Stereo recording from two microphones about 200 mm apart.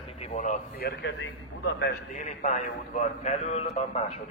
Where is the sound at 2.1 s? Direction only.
35° left (ahead or behind).